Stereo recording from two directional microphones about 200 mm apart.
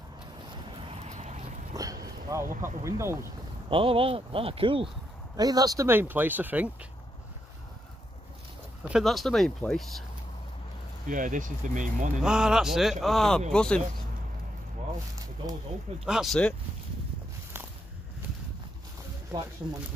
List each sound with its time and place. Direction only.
1.0 s boat: 35° right (ahead or behind)
1.7 s a sound: 15° right (ahead or behind)
3.7 s speech: 25° right (ahead or behind); by 6.9 s 10° right (ahead or behind)
8.8 s speech: centre (ahead or behind)
11.1 s speech: 40° right (ahead or behind)
12.2 s speech: 5° right (ahead or behind)
16.1 s speech: centre (ahead or behind)